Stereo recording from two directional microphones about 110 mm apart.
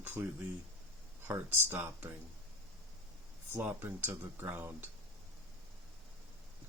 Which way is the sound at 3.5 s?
20° right (ahead or behind).